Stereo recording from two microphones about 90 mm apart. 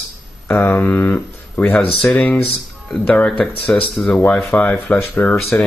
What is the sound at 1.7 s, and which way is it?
Speech, 5° left (ahead or behind).